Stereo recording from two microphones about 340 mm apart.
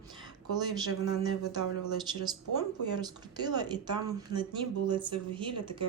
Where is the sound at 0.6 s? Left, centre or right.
Centre.